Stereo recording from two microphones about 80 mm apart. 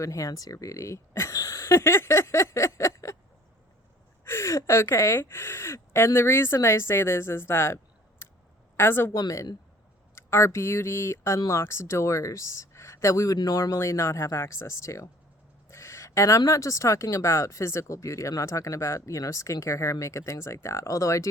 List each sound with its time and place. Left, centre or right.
0.0 s speech: left
4.2 s speech: left
8.2 s a sound: left
8.7 s speech: left
9.1 s speech: left
10.2 s speech: left
15.7 s a sound: left
16.5 s speech: left